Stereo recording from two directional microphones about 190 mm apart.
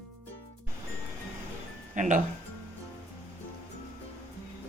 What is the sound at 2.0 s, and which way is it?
Speech, 40° right (ahead or behind).